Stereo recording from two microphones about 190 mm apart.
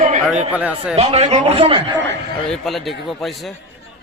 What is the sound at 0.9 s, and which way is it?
Speech, 35° right (ahead or behind).